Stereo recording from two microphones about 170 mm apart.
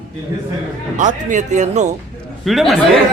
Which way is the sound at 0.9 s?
45° right (ahead or behind).